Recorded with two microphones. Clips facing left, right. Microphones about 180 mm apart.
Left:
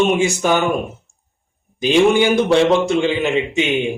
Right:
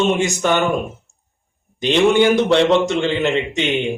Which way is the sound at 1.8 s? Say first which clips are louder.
Even; 10° left (ahead or behind).